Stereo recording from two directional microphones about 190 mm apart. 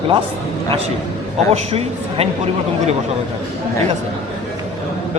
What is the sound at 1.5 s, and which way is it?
Speech, 30° right (ahead or behind).